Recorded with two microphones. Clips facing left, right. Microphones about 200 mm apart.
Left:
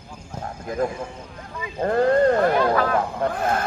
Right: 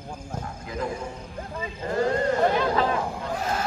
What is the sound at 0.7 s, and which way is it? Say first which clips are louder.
Speech: left 7 dB; 45° left (ahead or behind).